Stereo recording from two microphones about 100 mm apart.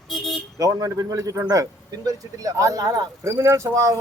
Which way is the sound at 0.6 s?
35° right (ahead or behind).